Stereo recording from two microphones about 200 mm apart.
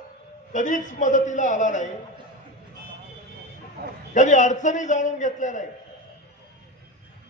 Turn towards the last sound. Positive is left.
turn(degrees=40)  # may be behind; listen again after turning